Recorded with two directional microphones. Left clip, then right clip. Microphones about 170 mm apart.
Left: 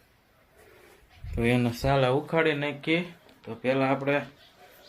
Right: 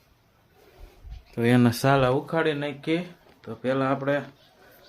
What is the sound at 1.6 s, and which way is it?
Speech, 65° right (ahead or behind).